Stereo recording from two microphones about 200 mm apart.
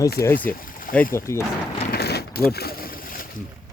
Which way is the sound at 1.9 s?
55° left (ahead or behind).